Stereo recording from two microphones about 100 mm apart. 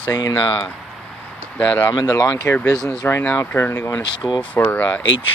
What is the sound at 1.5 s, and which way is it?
Speech, 15° left (ahead or behind).